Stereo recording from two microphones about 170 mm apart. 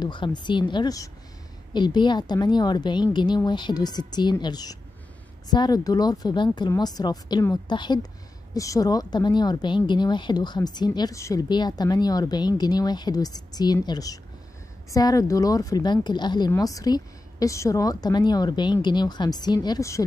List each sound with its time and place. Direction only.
0.0 s speech: 25° left (ahead or behind)